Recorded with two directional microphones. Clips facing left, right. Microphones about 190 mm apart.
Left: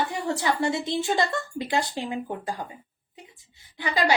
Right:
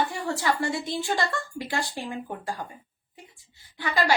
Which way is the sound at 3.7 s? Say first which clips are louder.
Left 1 dB; 20° left (ahead or behind).